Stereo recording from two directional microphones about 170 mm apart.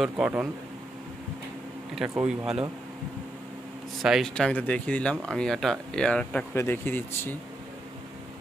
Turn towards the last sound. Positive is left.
turn(degrees=15)  # may be behind; listen again after turning